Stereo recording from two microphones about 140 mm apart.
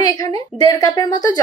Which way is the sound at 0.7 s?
25° left (ahead or behind).